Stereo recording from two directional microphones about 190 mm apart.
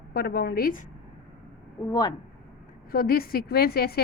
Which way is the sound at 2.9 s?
50° left (ahead or behind).